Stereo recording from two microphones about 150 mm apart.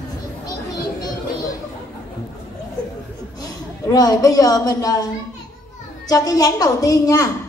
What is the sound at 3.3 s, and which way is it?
A woman's voice, 25° left (ahead or behind).